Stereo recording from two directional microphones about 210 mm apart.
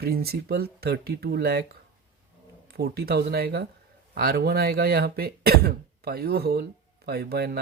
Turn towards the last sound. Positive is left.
turn(degrees=-50)  # may be behind; listen again after turning